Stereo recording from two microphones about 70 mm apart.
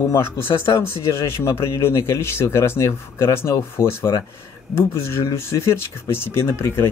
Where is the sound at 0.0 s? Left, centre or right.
Left.